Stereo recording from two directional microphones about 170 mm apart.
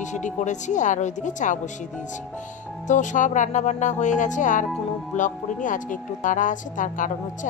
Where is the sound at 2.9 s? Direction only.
45° left (ahead or behind).